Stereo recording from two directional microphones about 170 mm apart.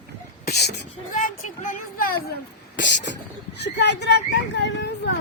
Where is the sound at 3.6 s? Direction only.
90° left.